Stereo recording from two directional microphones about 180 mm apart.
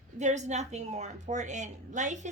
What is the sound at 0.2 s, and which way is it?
A woman's voice, 40° right (ahead or behind).